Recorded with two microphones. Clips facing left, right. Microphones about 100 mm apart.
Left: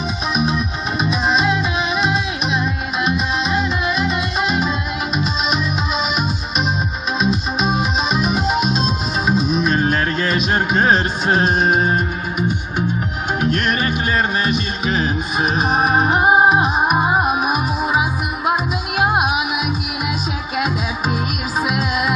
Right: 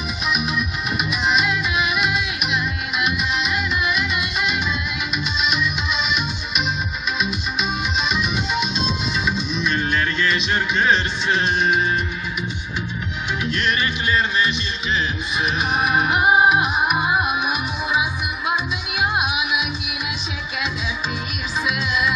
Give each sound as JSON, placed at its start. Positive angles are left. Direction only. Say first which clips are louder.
{"t": 0.3, "sound": "music", "louder": "left 3 dB", "side_deg": 35}
{"t": 7.2, "sound": "music", "louder": "left 7 dB", "side_deg": 35}
{"t": 21.6, "sound": "music", "louder": "left 1 dB", "side_deg": 45}